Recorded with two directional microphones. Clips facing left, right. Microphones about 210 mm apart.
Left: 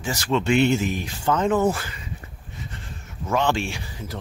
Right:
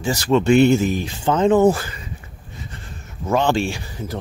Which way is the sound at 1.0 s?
25° right (ahead or behind).